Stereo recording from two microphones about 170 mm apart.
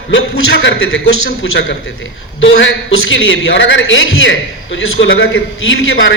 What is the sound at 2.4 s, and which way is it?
A man's voice, 90° left.